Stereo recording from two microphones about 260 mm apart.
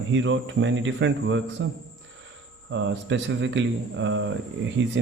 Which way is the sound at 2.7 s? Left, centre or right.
Right.